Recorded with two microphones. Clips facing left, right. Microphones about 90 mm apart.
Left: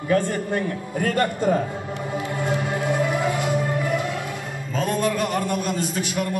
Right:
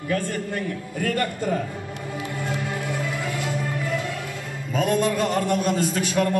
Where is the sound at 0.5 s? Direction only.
30° left (ahead or behind).